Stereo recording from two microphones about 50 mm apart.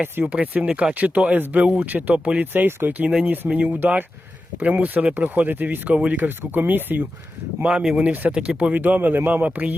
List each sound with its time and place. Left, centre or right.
0.0 s a man's voice: right
0.7 s speech: centre
0.9 s a man's voice: right
2.1 s speech: right
2.5 s a man's voice: right
5.9 s speech: right
6.2 s a man's voice: right
7.6 s speech: right
8.7 s a man's voice: right